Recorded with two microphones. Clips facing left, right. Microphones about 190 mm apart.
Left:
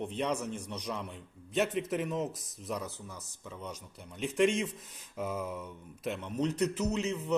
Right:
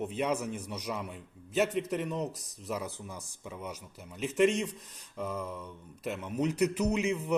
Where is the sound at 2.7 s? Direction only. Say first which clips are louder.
Right 1 dB; 10° right (ahead or behind).